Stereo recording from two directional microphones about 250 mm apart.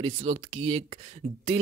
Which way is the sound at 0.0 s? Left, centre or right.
Right.